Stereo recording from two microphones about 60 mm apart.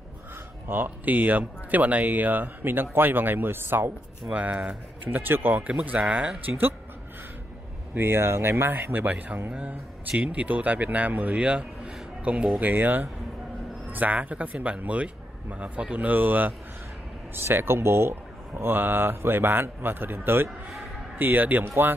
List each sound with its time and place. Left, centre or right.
0.7 s speech: right
4.3 s speech: right
7.9 s speech: right
9.0 s speech: right
12.5 s speech: right